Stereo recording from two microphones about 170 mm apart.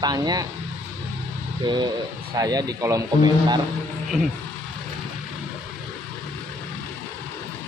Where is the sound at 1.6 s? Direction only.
25° right (ahead or behind).